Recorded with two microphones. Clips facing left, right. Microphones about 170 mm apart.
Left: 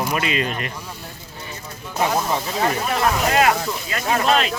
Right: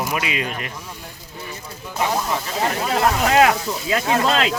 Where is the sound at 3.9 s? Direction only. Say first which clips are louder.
Even; 90° right.